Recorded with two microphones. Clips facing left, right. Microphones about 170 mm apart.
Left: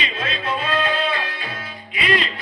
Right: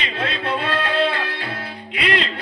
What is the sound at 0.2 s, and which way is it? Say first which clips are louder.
Music: right 3 dB; 65° right (ahead or behind).